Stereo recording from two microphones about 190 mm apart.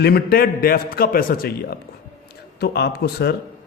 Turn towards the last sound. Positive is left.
turn(degrees=60)  # may be behind; listen again after turning